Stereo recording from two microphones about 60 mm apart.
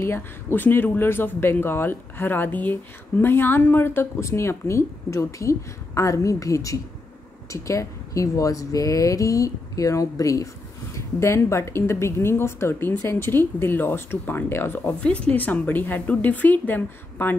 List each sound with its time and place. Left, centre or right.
0.0 s speech: left
11.0 s speech: left
15.0 s a woman's voice: centre